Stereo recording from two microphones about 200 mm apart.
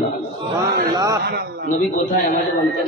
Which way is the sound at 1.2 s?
55° right (ahead or behind).